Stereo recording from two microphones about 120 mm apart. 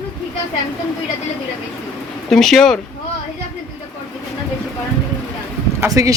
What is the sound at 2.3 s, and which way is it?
Speech, 5° left (ahead or behind).